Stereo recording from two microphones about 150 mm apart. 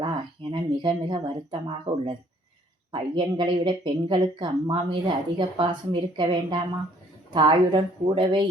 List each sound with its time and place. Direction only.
0.5 s speech: 30° right (ahead or behind)